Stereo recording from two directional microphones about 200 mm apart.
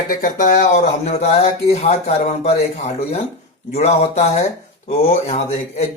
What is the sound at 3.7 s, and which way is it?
Speech, 30° left (ahead or behind).